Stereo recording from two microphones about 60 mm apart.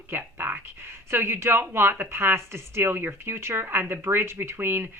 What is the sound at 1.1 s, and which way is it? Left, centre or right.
Speech, right.